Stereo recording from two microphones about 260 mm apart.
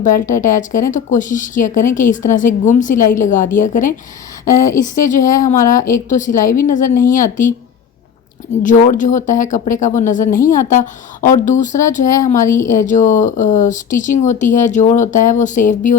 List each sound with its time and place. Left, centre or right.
0.0 s a woman's voice: left
4.4 s speech: centre
4.9 s a woman's voice: left
8.6 s speech: left